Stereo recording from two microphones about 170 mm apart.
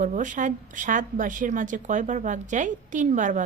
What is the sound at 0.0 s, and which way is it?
A woman's voice, 50° right (ahead or behind).